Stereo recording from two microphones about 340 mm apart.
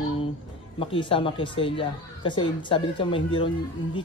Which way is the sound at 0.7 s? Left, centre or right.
Centre.